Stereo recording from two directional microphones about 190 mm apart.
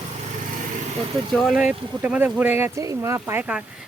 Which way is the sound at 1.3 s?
Centre (ahead or behind).